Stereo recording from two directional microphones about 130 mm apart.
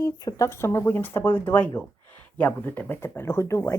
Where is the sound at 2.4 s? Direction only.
15° left (ahead or behind).